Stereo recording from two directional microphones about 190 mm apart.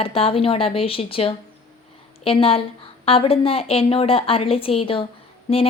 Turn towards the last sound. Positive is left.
turn(degrees=30)  # may be behind; listen again after turning